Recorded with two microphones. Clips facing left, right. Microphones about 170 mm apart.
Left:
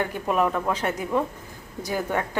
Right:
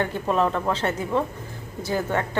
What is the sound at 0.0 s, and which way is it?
A woman's voice, 10° left (ahead or behind).